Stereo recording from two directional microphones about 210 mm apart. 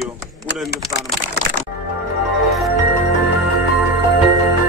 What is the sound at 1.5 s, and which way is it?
Music, 65° right (ahead or behind).